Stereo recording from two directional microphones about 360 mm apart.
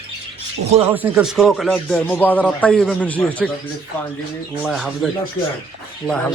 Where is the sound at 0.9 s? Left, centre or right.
Centre.